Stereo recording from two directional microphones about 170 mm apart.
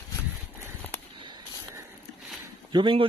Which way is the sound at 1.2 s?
25° right (ahead or behind).